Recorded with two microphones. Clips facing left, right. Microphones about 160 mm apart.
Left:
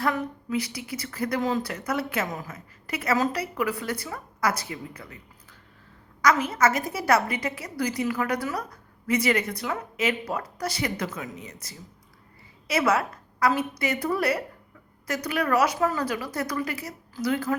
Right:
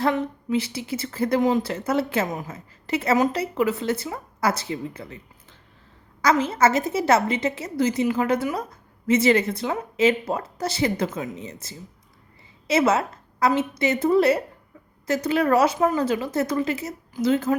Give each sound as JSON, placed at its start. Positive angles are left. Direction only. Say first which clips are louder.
{"t": 0.0, "sound": "a woman's voice", "louder": "right 4 dB", "side_deg": -25}
{"t": 6.2, "sound": "a woman's voice", "louder": "right 3 dB", "side_deg": -25}